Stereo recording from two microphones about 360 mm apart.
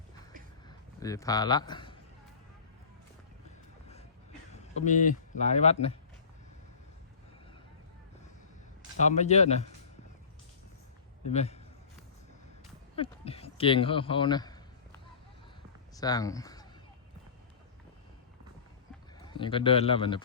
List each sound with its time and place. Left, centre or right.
0.7 s a man's voice: centre
4.9 s speech: left
9.0 s a man's voice: centre
11.3 s a man's voice: centre
13.0 s a sound: centre
16.0 s speech: centre
19.2 s a man's voice: centre